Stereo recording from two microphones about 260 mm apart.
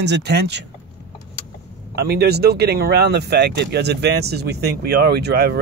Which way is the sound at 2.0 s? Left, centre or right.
Right.